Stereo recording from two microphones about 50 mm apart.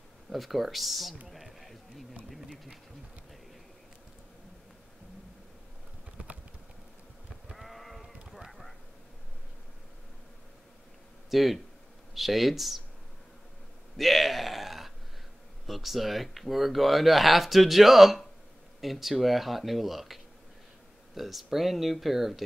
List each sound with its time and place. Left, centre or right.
0.3 s speech: centre
1.2 s sheep: centre
6.2 s typing: right
7.5 s sheep: centre
8.3 s a sound: centre
11.2 s speech: centre
13.9 s a sound: centre
15.6 s speech: centre